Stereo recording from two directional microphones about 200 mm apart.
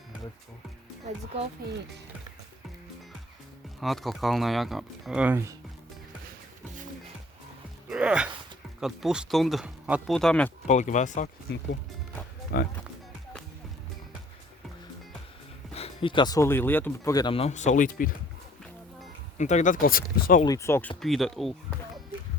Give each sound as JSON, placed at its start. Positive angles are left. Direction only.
{"t": 3.8, "sound": "speech", "side_deg": 0}
{"t": 7.9, "sound": "speech", "side_deg": -5}
{"t": 10.7, "sound": "speech", "side_deg": 35}
{"t": 11.5, "sound": "speech", "side_deg": 55}
{"t": 15.7, "sound": "speech", "side_deg": 30}
{"t": 19.4, "sound": "speech", "side_deg": 35}
{"t": 20.4, "sound": "speech", "side_deg": 15}
{"t": 21.0, "sound": "speech", "side_deg": 0}